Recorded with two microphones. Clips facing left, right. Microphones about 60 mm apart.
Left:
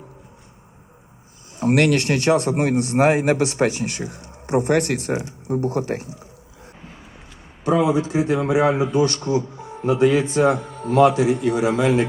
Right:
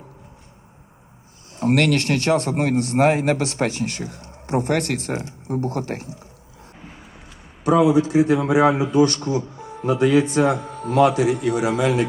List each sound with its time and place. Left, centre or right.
1.5 s a man's voice: centre
7.7 s a man's voice: left
8.5 s a man's voice: right
9.0 s a man's voice: left